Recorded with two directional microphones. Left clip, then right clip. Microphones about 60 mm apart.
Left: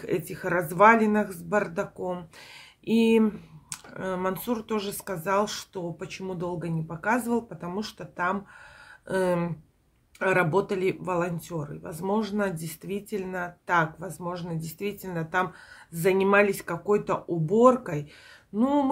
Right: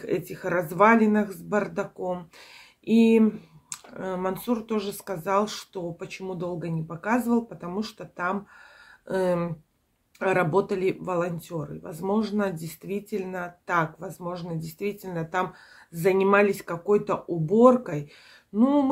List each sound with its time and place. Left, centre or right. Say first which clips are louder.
0.0 s speech: right 1 dB; left